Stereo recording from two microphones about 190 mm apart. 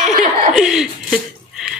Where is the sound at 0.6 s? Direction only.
5° right (ahead or behind).